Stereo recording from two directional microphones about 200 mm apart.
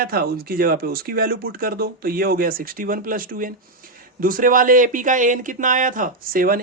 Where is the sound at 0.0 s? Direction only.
50° right (ahead or behind).